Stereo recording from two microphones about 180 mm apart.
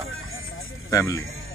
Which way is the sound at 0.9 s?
15° left (ahead or behind).